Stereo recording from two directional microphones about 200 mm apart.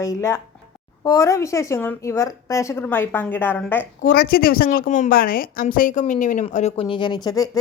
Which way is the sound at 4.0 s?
45° left (ahead or behind).